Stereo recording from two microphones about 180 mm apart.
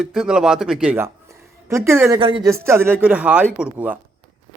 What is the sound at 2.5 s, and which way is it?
A man's voice, 15° right (ahead or behind).